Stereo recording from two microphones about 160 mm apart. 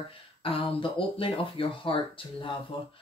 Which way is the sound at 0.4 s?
35° left (ahead or behind).